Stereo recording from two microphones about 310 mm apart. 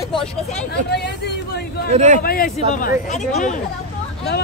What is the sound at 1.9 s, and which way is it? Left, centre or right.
Speech, right.